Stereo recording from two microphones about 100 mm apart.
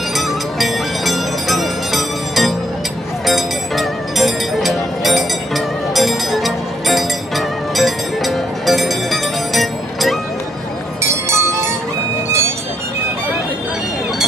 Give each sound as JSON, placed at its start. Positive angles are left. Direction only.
{"t": 0.6, "sound": "music", "side_deg": 0}
{"t": 11.0, "sound": "music", "side_deg": -30}